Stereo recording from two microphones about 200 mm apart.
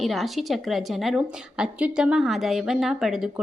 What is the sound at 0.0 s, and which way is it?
A woman's voice, centre (ahead or behind).